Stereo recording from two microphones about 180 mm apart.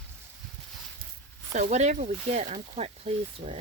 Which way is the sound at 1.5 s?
40° right (ahead or behind).